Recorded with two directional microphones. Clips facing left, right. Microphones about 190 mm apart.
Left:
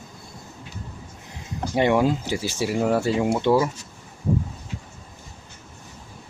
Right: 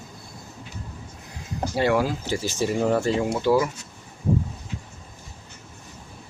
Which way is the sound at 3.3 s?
25° left (ahead or behind).